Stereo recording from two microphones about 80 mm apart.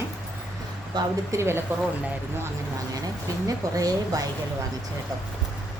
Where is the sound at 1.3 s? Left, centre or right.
Right.